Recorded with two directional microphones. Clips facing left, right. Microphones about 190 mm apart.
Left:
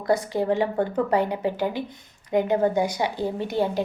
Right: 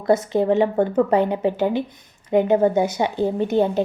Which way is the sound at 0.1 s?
20° right (ahead or behind).